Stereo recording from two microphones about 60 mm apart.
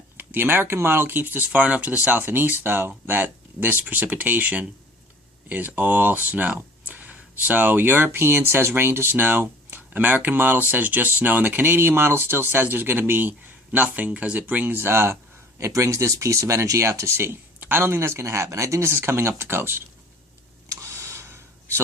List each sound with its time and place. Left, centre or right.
0.2 s speech: right
14.8 s speech: right
15.6 s speech: right
17.6 s speech: right
20.7 s a sound: right